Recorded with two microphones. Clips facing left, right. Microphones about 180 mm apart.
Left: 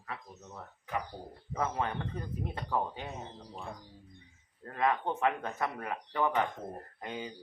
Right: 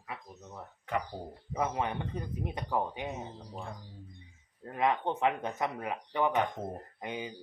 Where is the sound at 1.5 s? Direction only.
15° right (ahead or behind).